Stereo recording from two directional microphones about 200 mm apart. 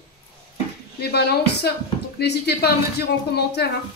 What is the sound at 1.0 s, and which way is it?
A woman's voice, 50° left (ahead or behind).